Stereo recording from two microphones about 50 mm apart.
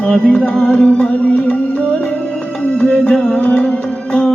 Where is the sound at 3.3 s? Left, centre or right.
Left.